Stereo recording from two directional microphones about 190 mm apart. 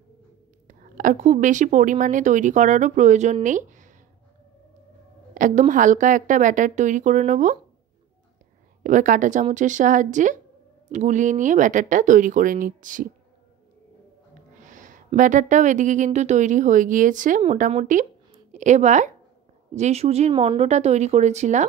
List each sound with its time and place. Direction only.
0.7 s speech: 45° right (ahead or behind)
5.3 s speech: 40° right (ahead or behind)
8.8 s speech: 45° right (ahead or behind)
14.6 s a sound: 40° right (ahead or behind)
15.1 s speech: 40° right (ahead or behind)